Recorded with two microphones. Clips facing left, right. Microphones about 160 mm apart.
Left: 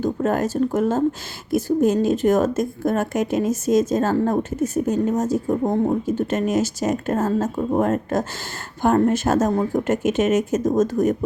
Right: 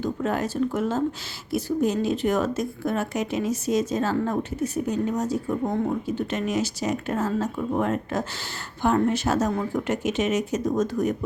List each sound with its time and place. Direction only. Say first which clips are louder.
0.0 s a woman's voice: left 5 dB; 45° left (ahead or behind)